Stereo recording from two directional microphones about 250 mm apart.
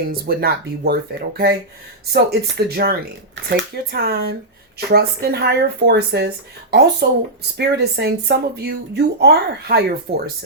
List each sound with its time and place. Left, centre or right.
0.1 s speech: right